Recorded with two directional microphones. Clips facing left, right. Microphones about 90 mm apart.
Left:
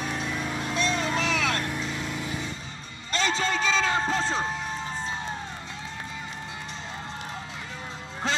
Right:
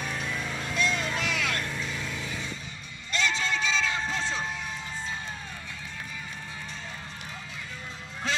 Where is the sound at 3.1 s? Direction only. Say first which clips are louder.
Left 3 dB; 40° left (ahead or behind).